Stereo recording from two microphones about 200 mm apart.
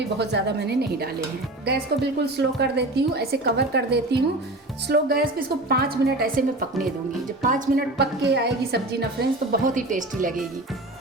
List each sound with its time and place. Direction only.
0.2 s a woman's voice: 60° right (ahead or behind)
9.5 s speech: 40° right (ahead or behind)